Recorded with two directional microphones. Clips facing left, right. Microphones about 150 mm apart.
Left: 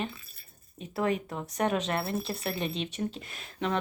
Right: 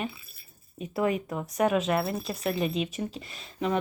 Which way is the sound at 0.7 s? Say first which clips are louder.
Right 2 dB; 10° right (ahead or behind).